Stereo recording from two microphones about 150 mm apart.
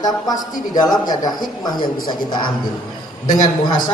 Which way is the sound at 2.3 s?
30° left (ahead or behind).